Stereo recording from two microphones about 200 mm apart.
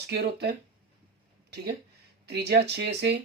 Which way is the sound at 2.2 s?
55° right (ahead or behind).